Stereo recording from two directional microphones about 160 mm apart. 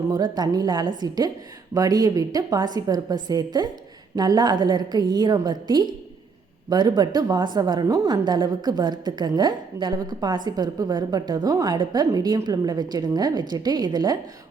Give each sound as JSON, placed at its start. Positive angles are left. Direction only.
{"t": 0.1, "sound": "a woman's voice", "side_deg": -25}